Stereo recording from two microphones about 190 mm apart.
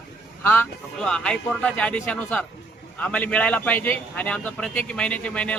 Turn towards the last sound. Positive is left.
turn(degrees=5)  # may be behind; listen again after turning